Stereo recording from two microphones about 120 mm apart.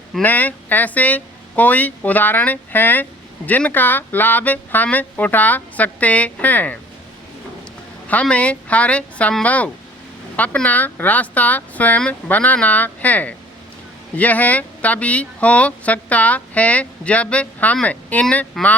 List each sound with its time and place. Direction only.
0.2 s speech: 15° left (ahead or behind)
8.0 s speech: 10° left (ahead or behind)